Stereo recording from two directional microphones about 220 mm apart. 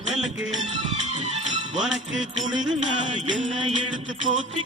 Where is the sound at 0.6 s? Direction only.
30° right (ahead or behind).